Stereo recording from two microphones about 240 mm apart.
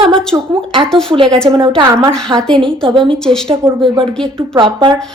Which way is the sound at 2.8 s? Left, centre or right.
Right.